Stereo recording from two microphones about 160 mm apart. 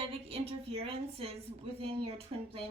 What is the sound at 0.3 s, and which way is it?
A woman's voice, 40° right (ahead or behind).